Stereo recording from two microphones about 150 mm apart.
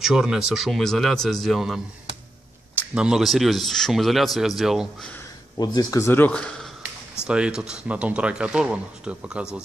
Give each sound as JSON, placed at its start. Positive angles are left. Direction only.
{"t": 0.0, "sound": "speech", "side_deg": -5}
{"t": 2.9, "sound": "speech", "side_deg": -5}
{"t": 5.6, "sound": "speech", "side_deg": 25}
{"t": 7.2, "sound": "speech", "side_deg": -5}